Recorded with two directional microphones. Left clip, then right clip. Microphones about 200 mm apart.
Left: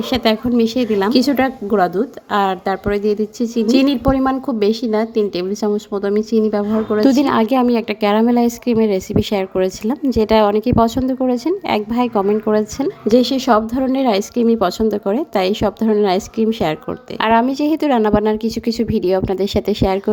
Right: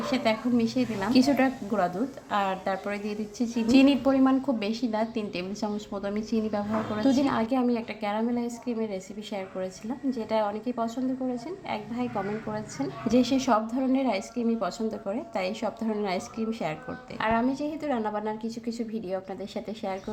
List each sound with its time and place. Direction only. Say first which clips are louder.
0.1 s a woman's voice: left 10 dB; 40° left (ahead or behind)